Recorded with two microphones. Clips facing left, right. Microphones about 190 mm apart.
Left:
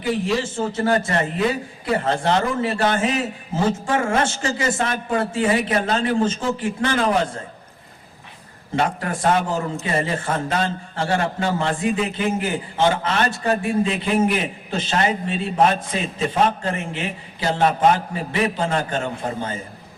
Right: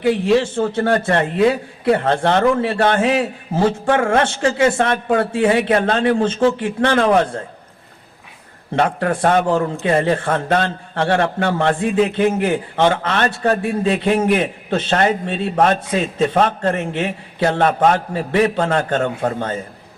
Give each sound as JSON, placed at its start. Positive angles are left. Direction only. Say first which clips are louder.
{"t": 0.0, "sound": "a man's voice", "louder": "right 7 dB", "side_deg": -65}
{"t": 8.7, "sound": "a man's voice", "louder": "right 5 dB", "side_deg": -60}